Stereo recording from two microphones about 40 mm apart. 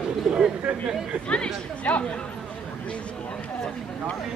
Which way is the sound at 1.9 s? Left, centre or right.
Left.